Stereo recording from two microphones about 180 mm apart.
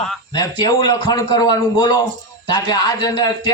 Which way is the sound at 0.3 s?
20° left (ahead or behind).